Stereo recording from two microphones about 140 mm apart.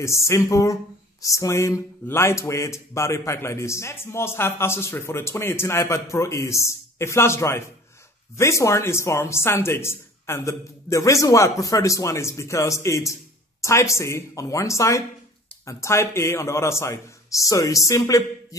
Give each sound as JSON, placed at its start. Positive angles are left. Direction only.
{"t": 0.3, "sound": "speech", "side_deg": 20}